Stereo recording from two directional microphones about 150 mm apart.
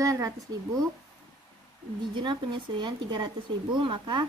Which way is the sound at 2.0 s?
30° right (ahead or behind).